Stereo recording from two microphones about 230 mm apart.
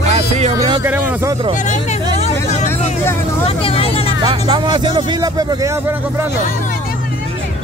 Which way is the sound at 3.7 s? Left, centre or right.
Left.